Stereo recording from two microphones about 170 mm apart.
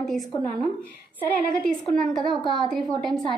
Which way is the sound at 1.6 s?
Centre (ahead or behind).